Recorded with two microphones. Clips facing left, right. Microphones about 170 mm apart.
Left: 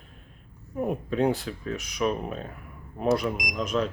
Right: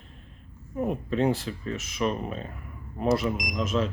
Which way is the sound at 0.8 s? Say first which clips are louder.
Even; centre (ahead or behind).